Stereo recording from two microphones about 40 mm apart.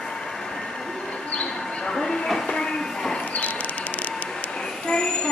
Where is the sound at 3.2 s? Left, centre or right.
Left.